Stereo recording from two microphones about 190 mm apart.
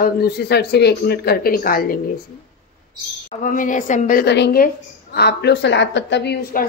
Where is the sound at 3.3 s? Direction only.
45° left (ahead or behind).